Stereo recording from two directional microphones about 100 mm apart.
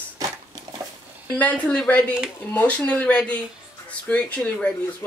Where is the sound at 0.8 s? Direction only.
35° right (ahead or behind).